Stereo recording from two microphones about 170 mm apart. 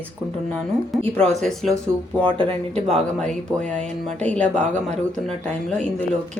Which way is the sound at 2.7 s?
5° left (ahead or behind).